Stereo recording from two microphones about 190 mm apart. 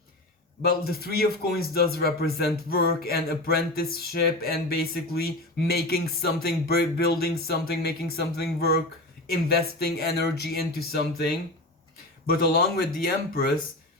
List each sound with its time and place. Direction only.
0.6 s speech: 55° left (ahead or behind)